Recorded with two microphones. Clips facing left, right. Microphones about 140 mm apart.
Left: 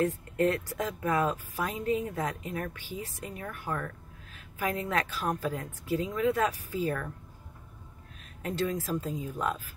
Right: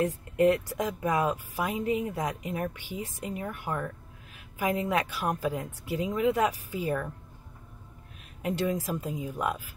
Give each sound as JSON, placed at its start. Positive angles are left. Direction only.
{"t": 0.0, "sound": "speech", "side_deg": -15}
{"t": 8.4, "sound": "speech", "side_deg": -15}